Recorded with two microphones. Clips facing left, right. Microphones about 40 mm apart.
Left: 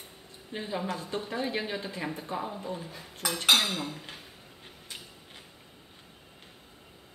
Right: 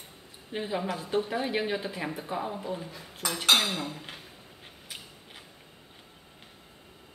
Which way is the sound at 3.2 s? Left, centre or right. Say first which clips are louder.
Even; centre.